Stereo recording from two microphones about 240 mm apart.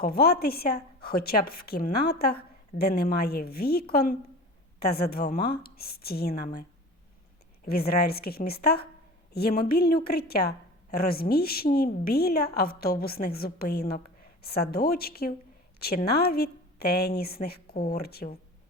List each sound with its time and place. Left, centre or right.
0.0 s a woman's voice: left